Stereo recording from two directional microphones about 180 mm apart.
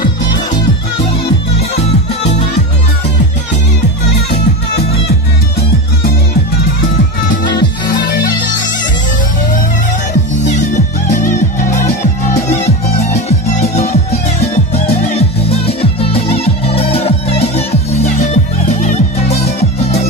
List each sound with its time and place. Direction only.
7.9 s music: 55° left (ahead or behind)
10.4 s music: 45° left (ahead or behind)
12.4 s music: 40° left (ahead or behind)